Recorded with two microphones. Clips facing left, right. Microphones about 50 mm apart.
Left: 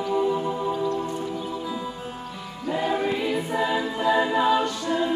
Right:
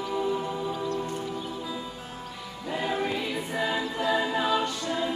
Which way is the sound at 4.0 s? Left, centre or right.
Left.